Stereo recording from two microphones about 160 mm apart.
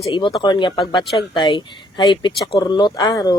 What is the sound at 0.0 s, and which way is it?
Speech, 30° left (ahead or behind).